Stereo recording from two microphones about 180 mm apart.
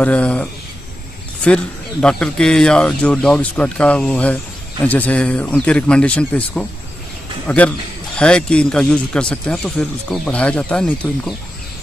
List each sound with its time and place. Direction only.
0.0 s speech: 5° left (ahead or behind)